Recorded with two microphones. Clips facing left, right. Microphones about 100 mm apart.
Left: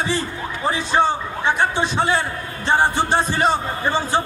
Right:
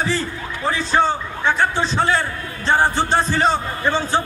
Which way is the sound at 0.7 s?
15° left (ahead or behind).